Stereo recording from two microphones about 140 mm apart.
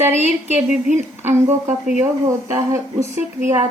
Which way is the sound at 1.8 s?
20° right (ahead or behind).